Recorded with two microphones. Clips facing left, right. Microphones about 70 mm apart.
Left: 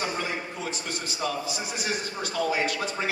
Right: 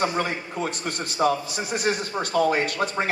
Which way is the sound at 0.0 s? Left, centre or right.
Right.